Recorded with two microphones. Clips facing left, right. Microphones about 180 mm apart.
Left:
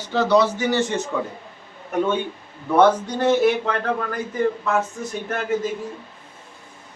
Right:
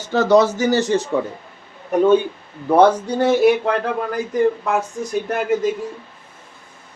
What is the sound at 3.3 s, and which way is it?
Speech, 10° right (ahead or behind).